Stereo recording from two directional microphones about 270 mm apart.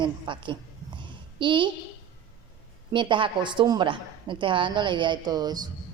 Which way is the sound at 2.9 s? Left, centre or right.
Centre.